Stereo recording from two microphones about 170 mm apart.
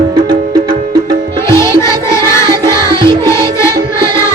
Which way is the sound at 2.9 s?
15° left (ahead or behind).